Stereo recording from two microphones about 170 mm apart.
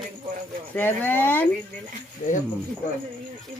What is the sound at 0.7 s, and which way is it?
Speech, 10° left (ahead or behind).